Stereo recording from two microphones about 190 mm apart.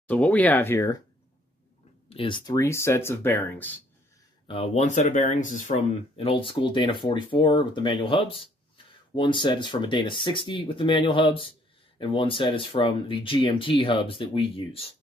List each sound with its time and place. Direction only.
0.1 s speech: 10° left (ahead or behind)
2.0 s speech: 25° left (ahead or behind); by 3.7 s 10° left (ahead or behind)
4.5 s speech: 35° left (ahead or behind)